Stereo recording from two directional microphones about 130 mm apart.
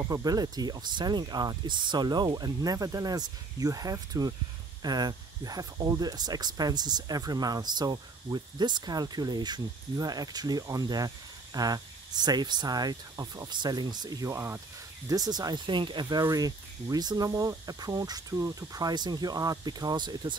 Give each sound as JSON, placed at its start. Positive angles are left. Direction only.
{"t": 0.0, "sound": "speech", "side_deg": -30}
{"t": 15.0, "sound": "speech", "side_deg": -30}